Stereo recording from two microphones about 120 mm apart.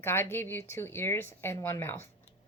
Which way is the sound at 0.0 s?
20° left (ahead or behind).